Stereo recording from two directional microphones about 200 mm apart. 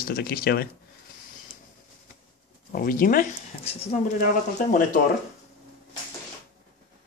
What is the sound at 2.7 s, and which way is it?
Speech, 45° left (ahead or behind).